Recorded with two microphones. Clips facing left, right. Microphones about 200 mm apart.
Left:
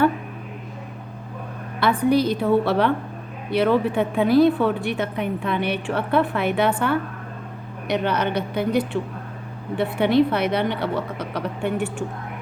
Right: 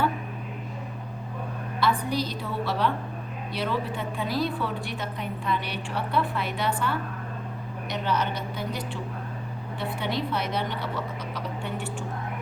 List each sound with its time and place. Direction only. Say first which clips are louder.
1.8 s a woman's voice: left 8 dB; 60° left (ahead or behind)